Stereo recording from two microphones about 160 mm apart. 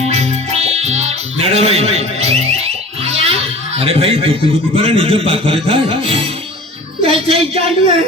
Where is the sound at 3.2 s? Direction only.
40° right (ahead or behind).